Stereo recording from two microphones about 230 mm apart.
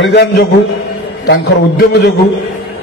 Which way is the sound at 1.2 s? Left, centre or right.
Left.